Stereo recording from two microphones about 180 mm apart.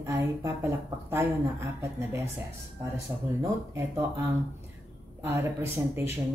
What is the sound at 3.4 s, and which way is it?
Speech, 15° right (ahead or behind).